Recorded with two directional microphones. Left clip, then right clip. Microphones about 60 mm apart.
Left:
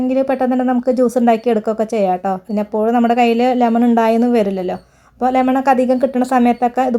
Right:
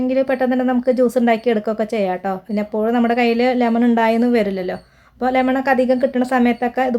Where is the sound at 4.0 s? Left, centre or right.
Left.